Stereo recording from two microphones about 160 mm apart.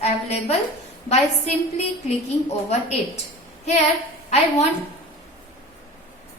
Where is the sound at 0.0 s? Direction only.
40° left (ahead or behind).